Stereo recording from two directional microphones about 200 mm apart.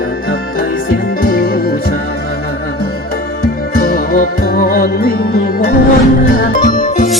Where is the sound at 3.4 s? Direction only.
45° left (ahead or behind).